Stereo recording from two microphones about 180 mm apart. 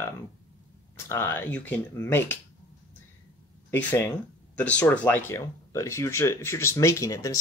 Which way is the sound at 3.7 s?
15° left (ahead or behind).